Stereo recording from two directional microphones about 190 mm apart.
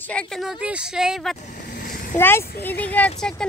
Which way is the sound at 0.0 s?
5° left (ahead or behind).